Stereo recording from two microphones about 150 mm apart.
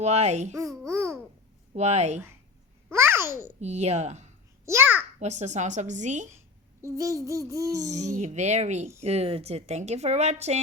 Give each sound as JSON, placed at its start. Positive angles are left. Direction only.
{"t": 0.0, "sound": "speech", "side_deg": -50}
{"t": 0.5, "sound": "babbling", "side_deg": -20}
{"t": 1.7, "sound": "speech", "side_deg": -45}
{"t": 2.9, "sound": "babbling", "side_deg": -15}
{"t": 3.6, "sound": "speech", "side_deg": -50}
{"t": 4.6, "sound": "a child's voice", "side_deg": -15}
{"t": 5.2, "sound": "speech", "side_deg": -50}
{"t": 6.8, "sound": "child singing", "side_deg": -20}
{"t": 7.9, "sound": "speech", "side_deg": -50}